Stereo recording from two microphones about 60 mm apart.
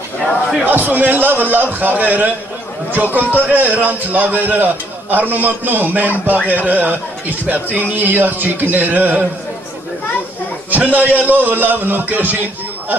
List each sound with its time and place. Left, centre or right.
0.7 s a man's voice: right
10.7 s a man's voice: right